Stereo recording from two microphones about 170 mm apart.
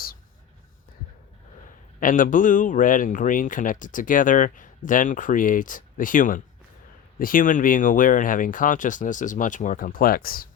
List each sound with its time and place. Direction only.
2.0 s speech: 50° left (ahead or behind)